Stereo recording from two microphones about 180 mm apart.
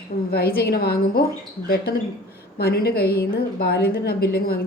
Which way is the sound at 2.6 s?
60° left (ahead or behind).